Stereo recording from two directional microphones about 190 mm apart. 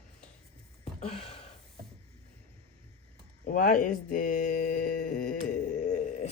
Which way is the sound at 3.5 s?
45° left (ahead or behind).